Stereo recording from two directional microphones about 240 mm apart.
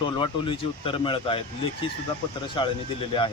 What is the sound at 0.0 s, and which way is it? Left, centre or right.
A man's voice, left.